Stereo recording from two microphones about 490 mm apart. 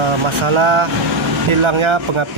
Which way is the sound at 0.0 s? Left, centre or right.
Right.